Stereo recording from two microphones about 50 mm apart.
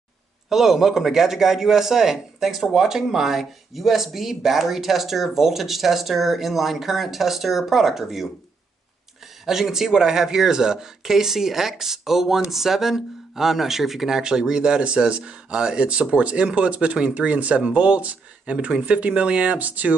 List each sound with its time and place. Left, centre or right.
0.5 s a man's voice: centre
9.5 s speech: centre; by 20.0 s right